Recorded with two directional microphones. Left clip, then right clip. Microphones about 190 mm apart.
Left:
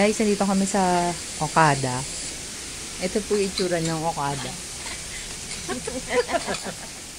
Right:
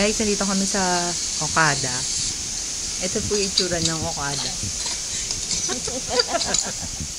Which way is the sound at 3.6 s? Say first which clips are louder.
Even; 15° left (ahead or behind).